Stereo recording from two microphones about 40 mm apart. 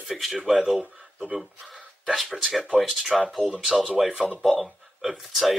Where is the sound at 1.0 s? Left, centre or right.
Right.